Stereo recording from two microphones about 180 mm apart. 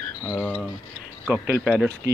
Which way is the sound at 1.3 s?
10° right (ahead or behind).